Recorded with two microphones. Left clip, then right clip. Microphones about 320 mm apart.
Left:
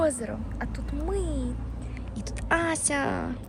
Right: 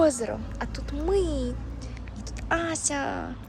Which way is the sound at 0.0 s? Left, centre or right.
Centre.